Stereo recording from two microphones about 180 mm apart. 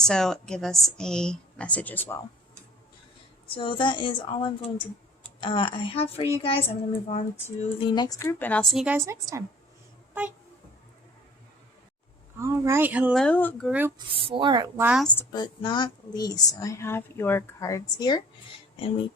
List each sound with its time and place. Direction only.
0.0 s a woman's voice: 5° left (ahead or behind)
3.4 s speech: 30° left (ahead or behind); by 8.6 s 10° left (ahead or behind)
8.7 s a woman's voice: 5° right (ahead or behind)
9.0 s speech: 15° right (ahead or behind)
12.4 s speech: 15° right (ahead or behind)
13.1 s a woman's voice: 5° left (ahead or behind)
13.7 s speech: 10° right (ahead or behind)
14.1 s speech: 30° right (ahead or behind)
14.8 s speech: 10° right (ahead or behind)
15.3 s speech: 25° left (ahead or behind)